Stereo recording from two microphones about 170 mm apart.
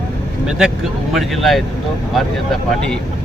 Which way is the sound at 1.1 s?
Centre (ahead or behind).